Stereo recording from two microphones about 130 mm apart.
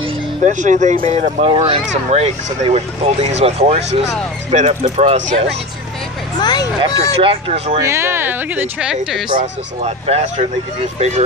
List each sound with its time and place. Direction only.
0.4 s speech: 70° right (ahead or behind)
1.0 s speech: 50° right (ahead or behind)
6.4 s speech: 30° left (ahead or behind)
7.2 s speech: 45° right (ahead or behind)
7.8 s speech: 20° right (ahead or behind)
9.4 s speech: 55° right (ahead or behind)